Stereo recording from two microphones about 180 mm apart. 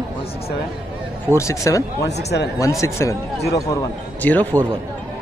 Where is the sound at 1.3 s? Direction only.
15° left (ahead or behind).